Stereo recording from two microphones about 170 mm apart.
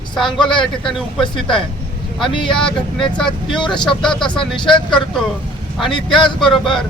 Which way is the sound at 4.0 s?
5° left (ahead or behind).